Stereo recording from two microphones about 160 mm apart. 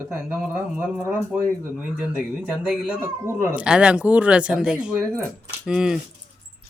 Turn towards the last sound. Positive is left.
turn(degrees=-5)  # may be behind; listen again after turning